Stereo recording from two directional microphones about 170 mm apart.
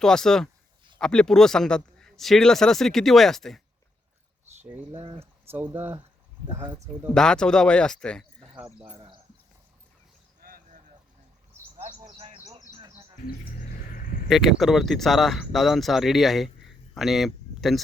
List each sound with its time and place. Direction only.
0.0 s speech: 5° left (ahead or behind)
4.6 s speech: 10° right (ahead or behind)
4.9 s speech: 30° right (ahead or behind)
5.2 s speech: 15° right (ahead or behind)
7.1 s speech: 5° left (ahead or behind)
10.4 s a sound: 55° right (ahead or behind)
12.0 s a sound: 35° right (ahead or behind)
12.5 s bird: 25° right (ahead or behind)
13.2 s a sound: 55° left (ahead or behind)
14.3 s speech: centre (ahead or behind)